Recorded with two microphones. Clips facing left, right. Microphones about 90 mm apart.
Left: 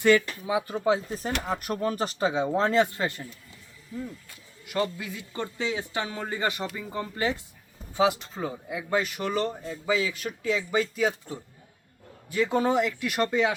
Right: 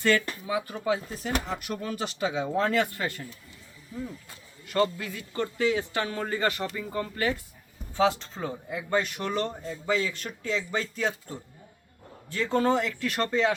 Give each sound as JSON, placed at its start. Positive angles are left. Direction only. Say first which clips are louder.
{"t": 0.0, "sound": "speech", "louder": "left 4 dB", "side_deg": 15}
{"t": 0.9, "sound": "speech", "louder": "even", "side_deg": 40}
{"t": 4.6, "sound": "speech", "louder": "right 3 dB", "side_deg": 10}